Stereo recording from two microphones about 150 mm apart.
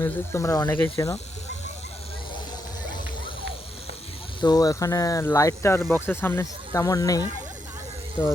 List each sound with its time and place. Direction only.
0.0 s speech: 20° left (ahead or behind)
4.4 s speech: 25° left (ahead or behind)